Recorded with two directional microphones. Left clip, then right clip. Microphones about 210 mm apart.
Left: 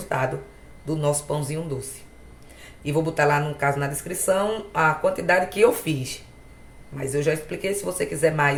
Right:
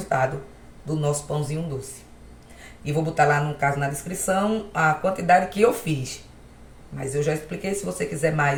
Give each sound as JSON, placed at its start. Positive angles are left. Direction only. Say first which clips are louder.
{"t": 0.9, "sound": "speech", "louder": "left 2 dB", "side_deg": 45}
{"t": 2.8, "sound": "speech", "louder": "right 1 dB", "side_deg": 45}